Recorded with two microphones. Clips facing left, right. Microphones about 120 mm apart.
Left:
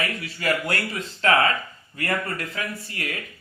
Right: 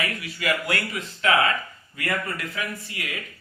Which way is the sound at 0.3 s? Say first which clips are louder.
Left 1 dB; 35° left (ahead or behind).